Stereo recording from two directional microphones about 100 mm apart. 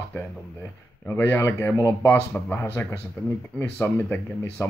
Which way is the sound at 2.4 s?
25° left (ahead or behind).